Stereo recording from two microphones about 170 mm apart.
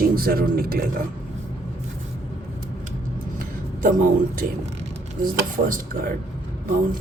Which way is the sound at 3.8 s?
50° right (ahead or behind).